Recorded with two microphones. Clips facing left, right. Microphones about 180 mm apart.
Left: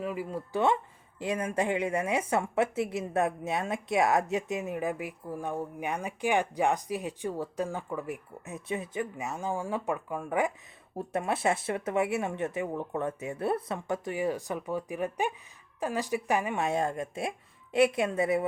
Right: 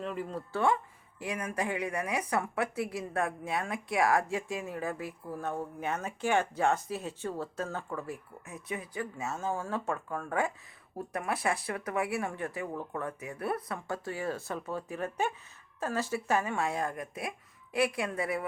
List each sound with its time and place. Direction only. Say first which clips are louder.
0.0 s a woman's voice: left 2 dB; 10° left (ahead or behind)
10.9 s speech: left 4 dB; 25° left (ahead or behind)